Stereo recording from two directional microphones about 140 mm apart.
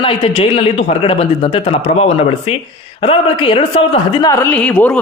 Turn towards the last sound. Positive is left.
turn(degrees=10)  # may be behind; listen again after turning